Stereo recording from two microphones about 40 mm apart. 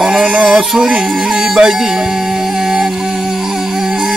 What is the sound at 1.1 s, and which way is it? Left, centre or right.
Music, centre.